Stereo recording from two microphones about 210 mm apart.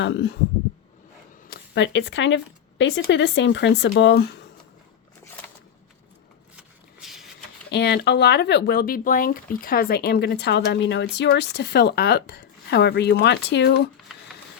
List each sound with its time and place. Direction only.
0.0 s speech: 55° left (ahead or behind)
1.5 s speech: 60° left (ahead or behind)
6.6 s a sound: centre (ahead or behind)
7.7 s speech: 50° left (ahead or behind)